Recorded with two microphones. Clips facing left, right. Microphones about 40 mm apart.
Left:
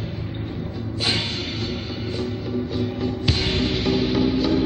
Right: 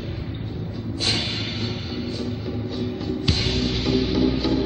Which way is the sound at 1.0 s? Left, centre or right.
Centre.